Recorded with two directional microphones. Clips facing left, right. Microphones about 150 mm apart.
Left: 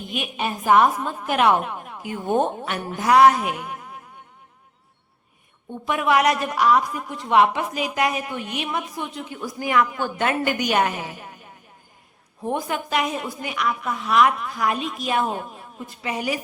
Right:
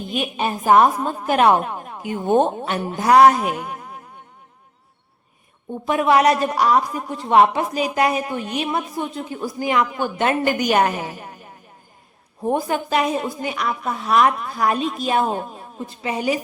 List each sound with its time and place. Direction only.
0.1 s a woman's voice: 35° right (ahead or behind)
2.0 s a woman's voice: 25° right (ahead or behind)
5.8 s a woman's voice: 30° right (ahead or behind)
10.4 s a woman's voice: 40° right (ahead or behind)
12.4 s a woman's voice: 35° right (ahead or behind)